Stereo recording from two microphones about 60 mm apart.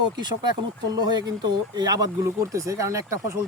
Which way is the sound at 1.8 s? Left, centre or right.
Right.